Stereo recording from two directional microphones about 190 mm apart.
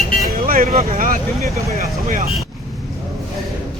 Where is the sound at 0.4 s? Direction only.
50° right (ahead or behind).